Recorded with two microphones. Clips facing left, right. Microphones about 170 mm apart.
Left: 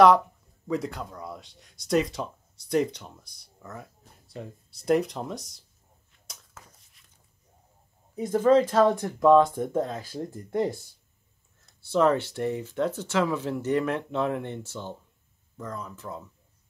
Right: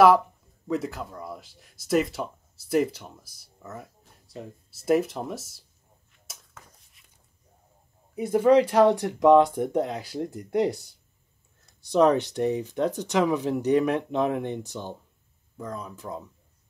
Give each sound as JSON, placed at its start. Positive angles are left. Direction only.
{"t": 0.7, "sound": "speech", "side_deg": 0}
{"t": 6.3, "sound": "a sound", "side_deg": -5}
{"t": 8.2, "sound": "speech", "side_deg": -10}
{"t": 11.8, "sound": "speech", "side_deg": -15}